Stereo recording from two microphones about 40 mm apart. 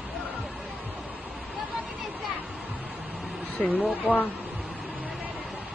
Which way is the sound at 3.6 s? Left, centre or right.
Left.